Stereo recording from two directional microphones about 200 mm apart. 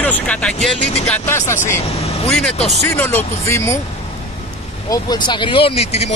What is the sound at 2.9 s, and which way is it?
Speech, 10° left (ahead or behind).